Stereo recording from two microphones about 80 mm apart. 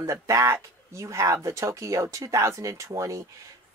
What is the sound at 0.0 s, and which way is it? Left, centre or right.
Speech, right.